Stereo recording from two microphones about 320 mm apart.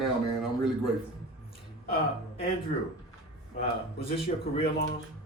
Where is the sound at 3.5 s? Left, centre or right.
Centre.